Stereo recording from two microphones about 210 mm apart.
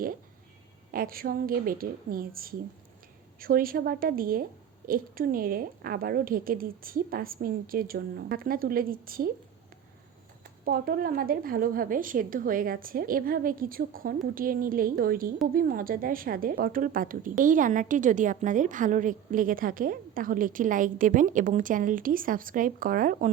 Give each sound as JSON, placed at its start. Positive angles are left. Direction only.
{"t": 0.9, "sound": "speech", "side_deg": -45}
{"t": 10.7, "sound": "a woman's voice", "side_deg": -45}